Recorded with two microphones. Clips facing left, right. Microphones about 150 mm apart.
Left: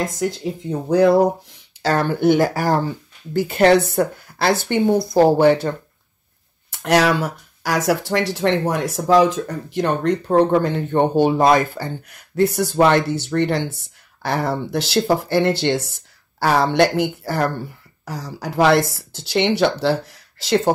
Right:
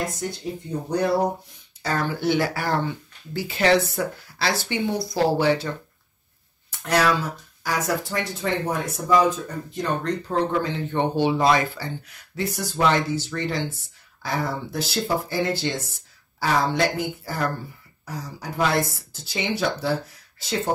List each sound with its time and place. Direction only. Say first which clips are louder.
0.0 s speech: left 6 dB; 90° left
1.8 s a woman's voice: left 7 dB; 70° left (ahead or behind); by 3.4 s 40° left (ahead or behind)
3.4 s a woman's voice: left 5 dB; 55° left (ahead or behind)
6.8 s speech: left 5 dB; 70° left (ahead or behind)
18.0 s speech: left 5 dB; 90° left